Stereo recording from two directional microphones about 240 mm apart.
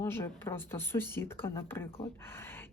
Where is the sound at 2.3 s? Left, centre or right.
Centre.